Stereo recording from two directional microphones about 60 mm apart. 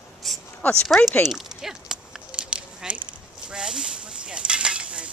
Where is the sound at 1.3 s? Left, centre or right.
Centre.